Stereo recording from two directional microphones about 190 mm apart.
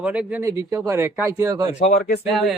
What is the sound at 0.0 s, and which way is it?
Speech, 5° right (ahead or behind).